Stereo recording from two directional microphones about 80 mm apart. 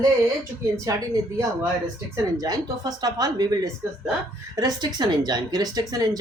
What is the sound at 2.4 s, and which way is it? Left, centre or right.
Speech, right.